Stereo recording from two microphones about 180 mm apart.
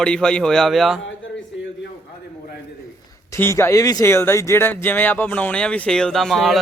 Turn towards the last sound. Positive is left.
turn(degrees=0)  # may be behind; listen again after turning